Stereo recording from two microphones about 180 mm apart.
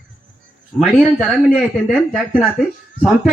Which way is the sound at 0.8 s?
Centre (ahead or behind).